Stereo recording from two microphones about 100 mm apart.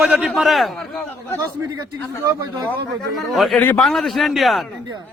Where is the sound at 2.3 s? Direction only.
30° right (ahead or behind).